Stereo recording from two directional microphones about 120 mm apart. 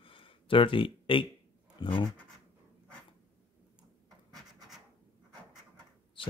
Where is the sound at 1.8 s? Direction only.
40° left (ahead or behind).